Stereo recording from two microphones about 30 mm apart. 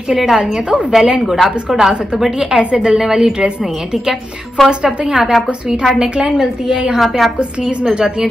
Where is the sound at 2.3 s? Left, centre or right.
Right.